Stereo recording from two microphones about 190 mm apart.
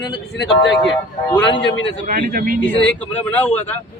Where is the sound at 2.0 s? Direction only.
50° right (ahead or behind).